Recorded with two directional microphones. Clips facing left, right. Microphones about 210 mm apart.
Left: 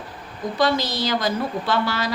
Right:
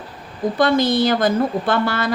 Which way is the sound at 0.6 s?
55° right (ahead or behind).